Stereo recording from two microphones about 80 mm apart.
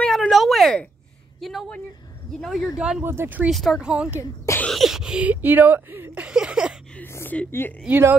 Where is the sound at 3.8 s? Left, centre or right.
Centre.